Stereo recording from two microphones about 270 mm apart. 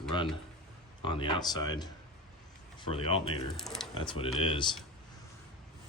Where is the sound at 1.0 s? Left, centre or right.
Centre.